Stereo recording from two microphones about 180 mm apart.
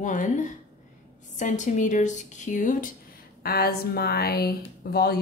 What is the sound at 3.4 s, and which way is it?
Speech, 60° left (ahead or behind).